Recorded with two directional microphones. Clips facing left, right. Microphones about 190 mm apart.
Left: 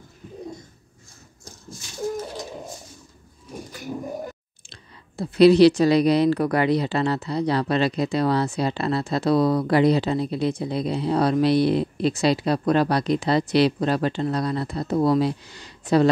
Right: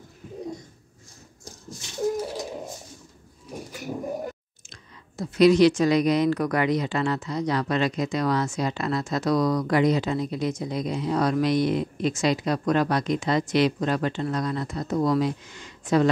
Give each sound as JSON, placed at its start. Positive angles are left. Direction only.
{"t": 4.6, "sound": "speech", "side_deg": 30}